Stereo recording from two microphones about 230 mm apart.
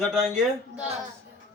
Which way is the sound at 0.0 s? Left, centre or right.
Centre.